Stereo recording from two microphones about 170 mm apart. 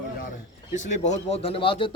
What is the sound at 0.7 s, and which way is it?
Speech, 45° left (ahead or behind).